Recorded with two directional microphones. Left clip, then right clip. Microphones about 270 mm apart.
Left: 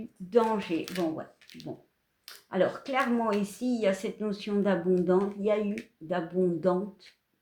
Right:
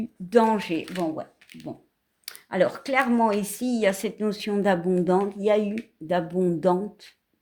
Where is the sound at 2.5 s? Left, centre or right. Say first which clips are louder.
Right 5 dB; right.